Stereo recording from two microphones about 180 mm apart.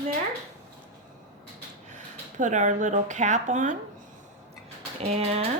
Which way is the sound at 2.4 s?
45° right (ahead or behind).